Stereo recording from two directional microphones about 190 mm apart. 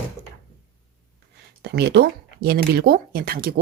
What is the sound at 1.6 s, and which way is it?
Speech, 60° right (ahead or behind).